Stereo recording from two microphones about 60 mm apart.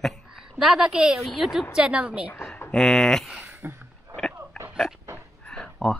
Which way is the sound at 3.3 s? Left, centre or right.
Right.